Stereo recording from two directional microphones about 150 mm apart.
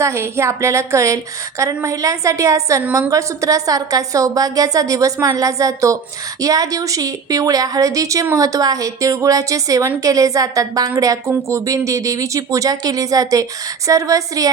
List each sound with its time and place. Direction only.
0.0 s a woman's voice: 20° right (ahead or behind)